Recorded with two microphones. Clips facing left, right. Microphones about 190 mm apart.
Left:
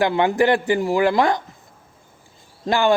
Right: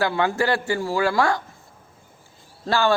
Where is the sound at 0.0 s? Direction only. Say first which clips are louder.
Left 4 dB; 20° left (ahead or behind).